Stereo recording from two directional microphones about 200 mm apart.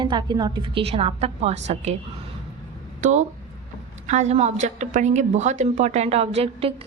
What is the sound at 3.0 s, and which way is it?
A woman's voice, 35° right (ahead or behind).